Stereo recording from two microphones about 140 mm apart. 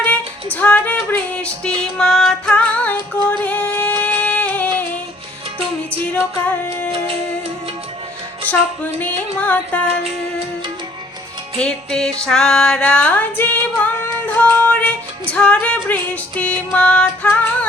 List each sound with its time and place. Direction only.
0.5 s music: 10° left (ahead or behind)
1.8 s female singing: 5° left (ahead or behind)
6.4 s music: 10° left (ahead or behind)
8.4 s music: 10° left (ahead or behind)
11.5 s music: 5° left (ahead or behind)